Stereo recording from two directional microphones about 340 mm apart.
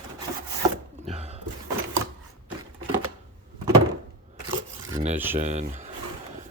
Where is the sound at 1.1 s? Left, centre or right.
Centre.